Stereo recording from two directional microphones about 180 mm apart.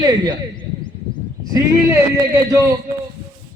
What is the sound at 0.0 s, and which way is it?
Speech, 20° right (ahead or behind).